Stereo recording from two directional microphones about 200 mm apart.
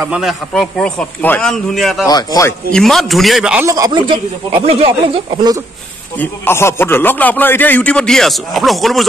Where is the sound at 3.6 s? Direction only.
15° right (ahead or behind).